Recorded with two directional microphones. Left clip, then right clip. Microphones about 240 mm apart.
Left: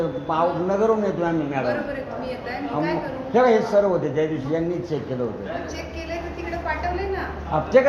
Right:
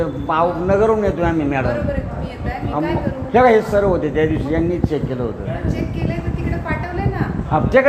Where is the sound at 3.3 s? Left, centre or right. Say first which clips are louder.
Right 5 dB; right.